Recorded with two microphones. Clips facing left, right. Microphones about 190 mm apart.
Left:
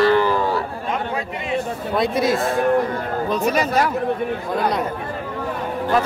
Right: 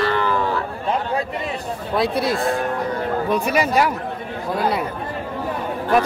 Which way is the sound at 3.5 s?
10° right (ahead or behind).